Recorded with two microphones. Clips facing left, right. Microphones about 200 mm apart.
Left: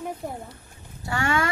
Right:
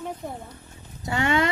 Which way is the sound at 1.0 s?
20° right (ahead or behind).